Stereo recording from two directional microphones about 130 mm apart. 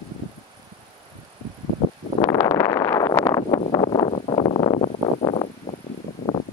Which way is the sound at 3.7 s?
40° left (ahead or behind).